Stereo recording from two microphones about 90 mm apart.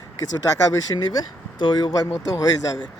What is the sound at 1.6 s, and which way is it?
Speech, 65° left (ahead or behind).